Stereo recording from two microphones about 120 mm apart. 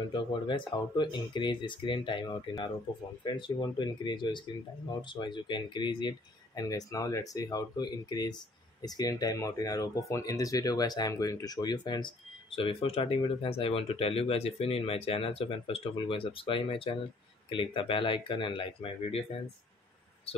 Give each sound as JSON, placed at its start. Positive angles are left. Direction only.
{"t": 0.1, "sound": "speech", "side_deg": 40}
{"t": 20.3, "sound": "speech", "side_deg": 55}